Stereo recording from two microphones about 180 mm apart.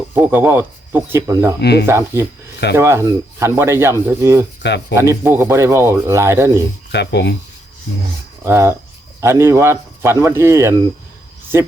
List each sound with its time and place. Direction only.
0.1 s speech: 10° right (ahead or behind)
1.6 s speech: 65° left (ahead or behind)
1.9 s speech: 15° right (ahead or behind)
4.6 s speech: 70° left (ahead or behind)
4.9 s speech: 15° right (ahead or behind)
6.9 s speech: 70° left (ahead or behind)
8.4 s speech: 15° right (ahead or behind)